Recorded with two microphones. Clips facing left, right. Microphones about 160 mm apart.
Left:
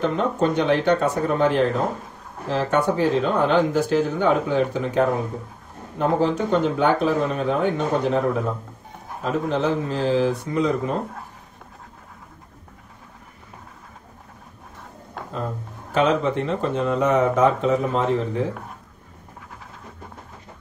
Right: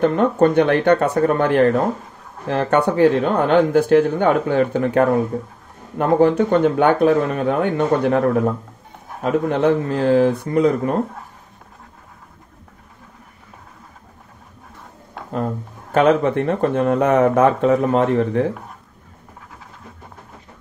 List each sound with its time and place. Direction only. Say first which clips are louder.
0.0 s speech: right 6 dB; 60° right (ahead or behind)
9.2 s speech: right 5 dB; 60° right (ahead or behind)
15.9 s speech: right 5 dB; 55° right (ahead or behind)